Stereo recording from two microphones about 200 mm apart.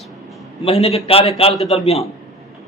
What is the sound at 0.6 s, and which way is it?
A man's voice, 30° left (ahead or behind).